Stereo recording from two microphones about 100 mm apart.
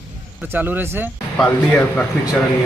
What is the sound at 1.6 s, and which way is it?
Speech, 20° left (ahead or behind).